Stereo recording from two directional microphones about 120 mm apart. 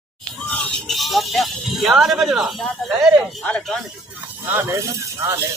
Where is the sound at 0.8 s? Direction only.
Centre (ahead or behind).